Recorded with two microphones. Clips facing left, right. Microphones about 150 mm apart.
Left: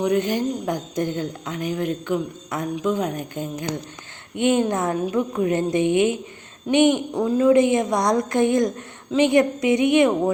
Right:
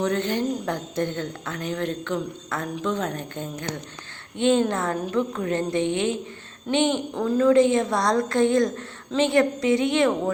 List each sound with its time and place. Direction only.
0.0 s a woman's voice: 15° left (ahead or behind)